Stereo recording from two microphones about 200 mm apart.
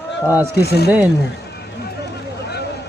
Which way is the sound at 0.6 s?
55° left (ahead or behind).